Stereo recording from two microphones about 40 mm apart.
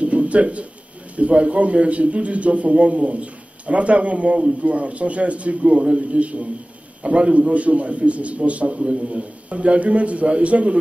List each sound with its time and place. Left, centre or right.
0.0 s pigeon: right
1.1 s a man's voice: right